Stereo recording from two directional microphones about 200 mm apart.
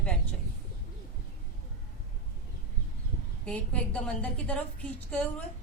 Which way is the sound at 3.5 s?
5° left (ahead or behind).